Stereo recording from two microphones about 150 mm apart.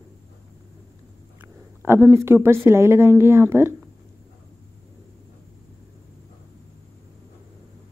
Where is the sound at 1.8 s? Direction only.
15° right (ahead or behind).